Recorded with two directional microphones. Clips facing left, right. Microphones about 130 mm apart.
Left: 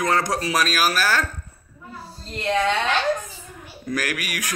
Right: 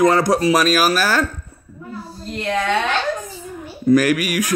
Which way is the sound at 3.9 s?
5° right (ahead or behind).